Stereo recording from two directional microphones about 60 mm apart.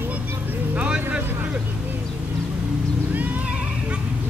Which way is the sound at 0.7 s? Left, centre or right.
Right.